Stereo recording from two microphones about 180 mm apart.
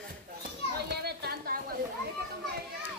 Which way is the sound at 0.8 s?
60° right (ahead or behind).